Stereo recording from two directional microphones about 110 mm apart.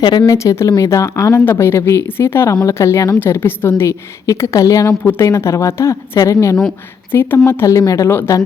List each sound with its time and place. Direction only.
0.0 s speech: 45° left (ahead or behind)
0.3 s speech: 30° left (ahead or behind)